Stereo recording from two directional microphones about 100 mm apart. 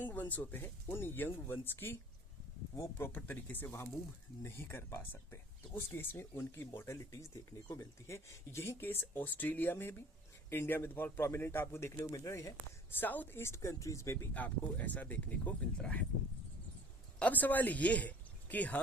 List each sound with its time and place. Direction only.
0.0 s speech: 20° left (ahead or behind)
13.0 s speech: 20° left (ahead or behind)
14.3 s speech: 15° left (ahead or behind)
17.2 s speech: 15° left (ahead or behind)